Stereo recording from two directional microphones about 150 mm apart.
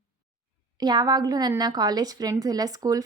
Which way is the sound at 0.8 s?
25° right (ahead or behind).